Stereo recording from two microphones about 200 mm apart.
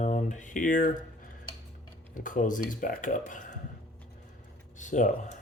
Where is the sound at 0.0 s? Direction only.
35° left (ahead or behind).